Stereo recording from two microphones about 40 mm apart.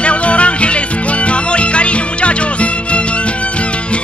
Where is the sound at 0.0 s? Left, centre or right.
Left.